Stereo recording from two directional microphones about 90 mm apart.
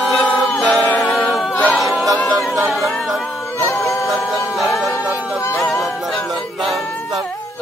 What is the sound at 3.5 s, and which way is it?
Music, 30° left (ahead or behind).